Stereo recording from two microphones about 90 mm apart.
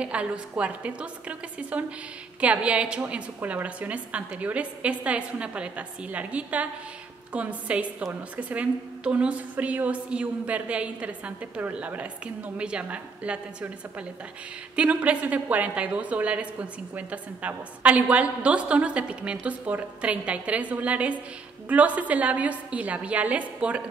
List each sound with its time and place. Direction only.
0.0 s a woman's voice: 15° right (ahead or behind)